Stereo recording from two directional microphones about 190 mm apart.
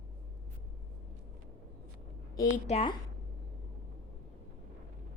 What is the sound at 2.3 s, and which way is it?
Speech, 40° left (ahead or behind).